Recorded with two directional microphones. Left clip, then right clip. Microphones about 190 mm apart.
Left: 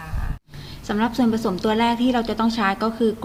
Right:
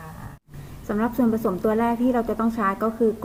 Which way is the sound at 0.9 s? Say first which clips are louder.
Left 2 dB; 25° left (ahead or behind).